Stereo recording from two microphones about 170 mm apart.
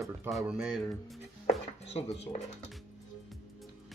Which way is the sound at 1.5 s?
35° left (ahead or behind).